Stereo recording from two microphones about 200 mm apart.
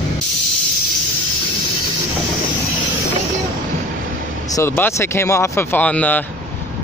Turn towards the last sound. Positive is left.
turn(degrees=5)  # may be behind; listen again after turning